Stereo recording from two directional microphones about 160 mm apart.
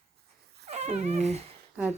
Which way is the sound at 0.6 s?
45° right (ahead or behind).